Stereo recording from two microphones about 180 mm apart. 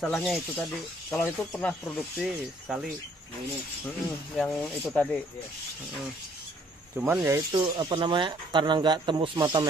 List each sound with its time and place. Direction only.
0.0 s speech: centre (ahead or behind)
4.4 s speech: 5° left (ahead or behind)
7.2 s speech: 20° right (ahead or behind)